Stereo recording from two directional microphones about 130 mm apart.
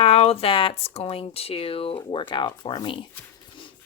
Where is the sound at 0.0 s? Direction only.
50° left (ahead or behind).